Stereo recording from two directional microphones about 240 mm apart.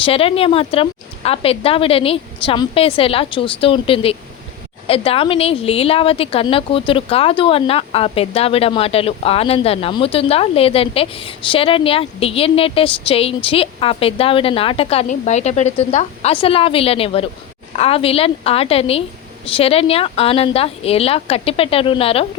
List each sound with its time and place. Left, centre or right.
0.0 s a woman's voice: left